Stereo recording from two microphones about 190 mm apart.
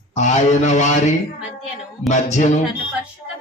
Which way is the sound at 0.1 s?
40° left (ahead or behind).